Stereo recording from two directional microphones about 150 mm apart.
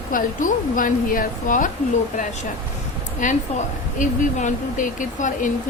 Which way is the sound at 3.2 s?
60° left (ahead or behind).